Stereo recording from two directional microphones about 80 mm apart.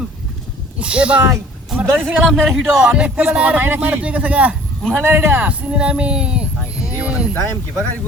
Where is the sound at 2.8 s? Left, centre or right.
Centre.